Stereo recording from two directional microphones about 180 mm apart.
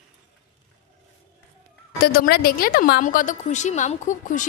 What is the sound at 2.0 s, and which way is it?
A woman's voice, 55° left (ahead or behind).